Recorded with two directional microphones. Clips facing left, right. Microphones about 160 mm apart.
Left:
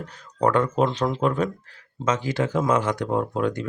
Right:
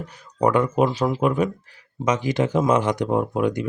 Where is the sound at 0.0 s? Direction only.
10° right (ahead or behind).